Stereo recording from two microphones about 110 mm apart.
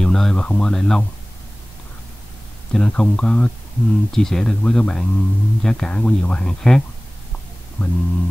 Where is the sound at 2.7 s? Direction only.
10° left (ahead or behind).